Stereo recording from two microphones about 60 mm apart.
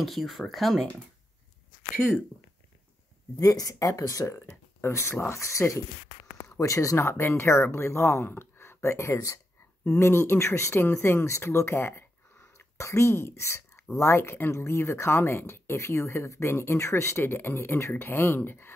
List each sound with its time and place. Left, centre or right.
0.0 s speech: centre
3.3 s speech: left
4.8 s speech: left
5.3 s speech: left
9.9 s speech: left